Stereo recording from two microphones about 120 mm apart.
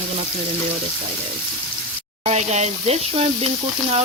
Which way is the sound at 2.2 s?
70° right (ahead or behind).